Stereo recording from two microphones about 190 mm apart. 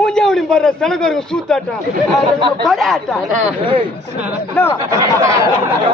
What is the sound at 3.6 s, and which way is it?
Speech, 25° right (ahead or behind).